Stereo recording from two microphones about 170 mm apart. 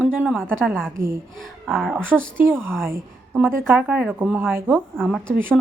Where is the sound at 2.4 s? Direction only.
15° right (ahead or behind).